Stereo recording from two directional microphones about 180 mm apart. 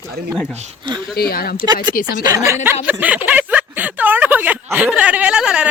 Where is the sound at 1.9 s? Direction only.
55° left (ahead or behind).